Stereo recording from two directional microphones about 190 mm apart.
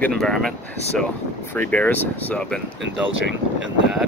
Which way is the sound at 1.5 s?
10° left (ahead or behind).